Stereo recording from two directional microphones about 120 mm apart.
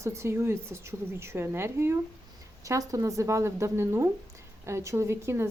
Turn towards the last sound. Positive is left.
turn(degrees=-20)  # may be behind; listen again after turning